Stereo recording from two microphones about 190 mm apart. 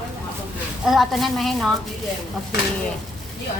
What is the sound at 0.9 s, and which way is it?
Speech, centre (ahead or behind).